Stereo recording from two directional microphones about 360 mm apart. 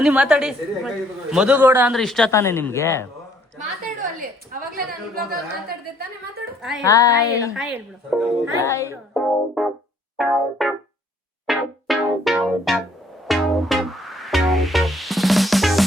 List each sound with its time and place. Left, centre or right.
0.0 s a man's voice: centre
4.6 s a woman's voice: right
6.6 s a woman's voice: centre
11.4 s music: centre